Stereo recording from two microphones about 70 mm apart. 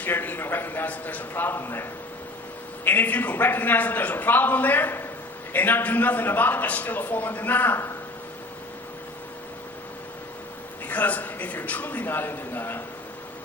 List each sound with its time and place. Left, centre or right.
0.0 s a man's voice: left
10.8 s a man's voice: left